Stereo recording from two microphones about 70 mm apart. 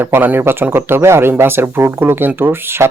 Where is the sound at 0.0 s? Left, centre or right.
Right.